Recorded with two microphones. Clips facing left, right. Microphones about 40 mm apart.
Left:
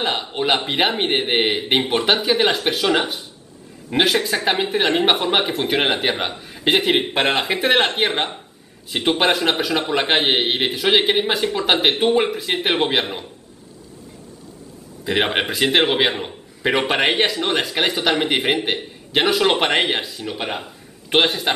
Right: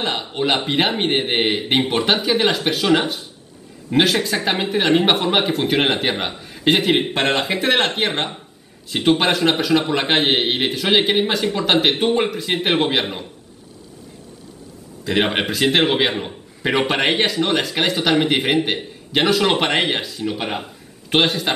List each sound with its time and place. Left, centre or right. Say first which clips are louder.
0.0 s a man's voice: even; centre
15.0 s a man's voice: even; centre